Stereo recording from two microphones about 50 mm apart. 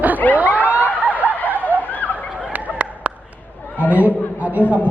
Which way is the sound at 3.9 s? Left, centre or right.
Right.